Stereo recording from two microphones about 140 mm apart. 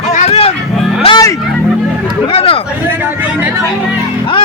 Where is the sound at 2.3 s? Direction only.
45° left (ahead or behind).